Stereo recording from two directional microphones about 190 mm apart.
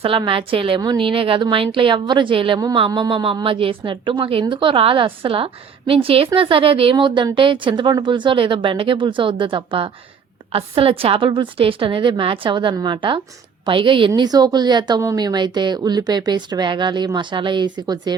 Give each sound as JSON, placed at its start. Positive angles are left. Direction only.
{"t": 0.0, "sound": "a woman's voice", "side_deg": -25}